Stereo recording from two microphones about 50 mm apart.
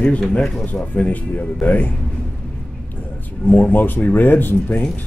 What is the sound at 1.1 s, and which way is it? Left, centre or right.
Speech, left.